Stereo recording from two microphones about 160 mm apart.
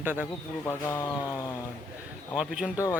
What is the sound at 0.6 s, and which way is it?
Speech, 15° left (ahead or behind).